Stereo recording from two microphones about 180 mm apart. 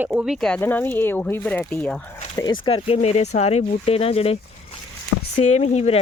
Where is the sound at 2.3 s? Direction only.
25° left (ahead or behind).